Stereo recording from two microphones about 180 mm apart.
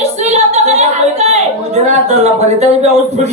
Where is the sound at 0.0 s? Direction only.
40° right (ahead or behind).